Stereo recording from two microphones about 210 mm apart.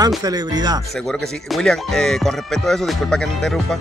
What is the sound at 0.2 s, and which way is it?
Speech, 20° right (ahead or behind).